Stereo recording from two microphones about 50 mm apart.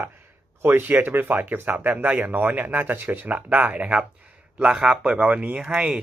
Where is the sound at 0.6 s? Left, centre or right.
Right.